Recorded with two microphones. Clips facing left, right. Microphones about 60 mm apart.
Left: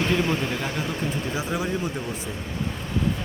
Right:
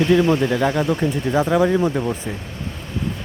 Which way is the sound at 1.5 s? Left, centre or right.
Right.